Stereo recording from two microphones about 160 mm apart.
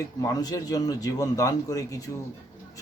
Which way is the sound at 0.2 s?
25° left (ahead or behind).